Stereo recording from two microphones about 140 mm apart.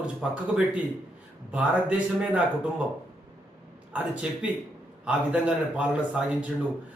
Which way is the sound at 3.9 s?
10° right (ahead or behind).